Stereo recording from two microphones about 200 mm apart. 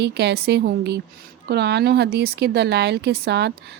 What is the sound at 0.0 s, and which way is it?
Speech, 55° right (ahead or behind).